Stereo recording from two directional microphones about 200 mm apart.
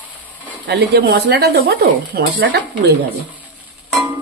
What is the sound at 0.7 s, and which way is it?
Speech, 55° right (ahead or behind).